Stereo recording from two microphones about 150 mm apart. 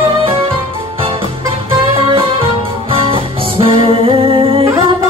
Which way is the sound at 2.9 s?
35° right (ahead or behind).